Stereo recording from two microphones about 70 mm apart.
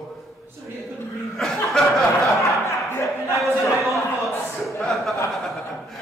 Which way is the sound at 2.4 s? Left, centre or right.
Left.